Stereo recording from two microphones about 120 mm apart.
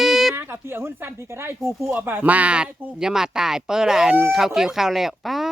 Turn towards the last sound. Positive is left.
turn(degrees=0)  # may be behind; listen again after turning